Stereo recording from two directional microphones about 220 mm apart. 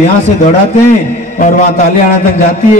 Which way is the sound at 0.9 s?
35° left (ahead or behind).